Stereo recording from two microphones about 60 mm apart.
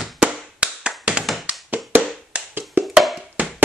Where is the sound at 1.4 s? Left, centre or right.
Right.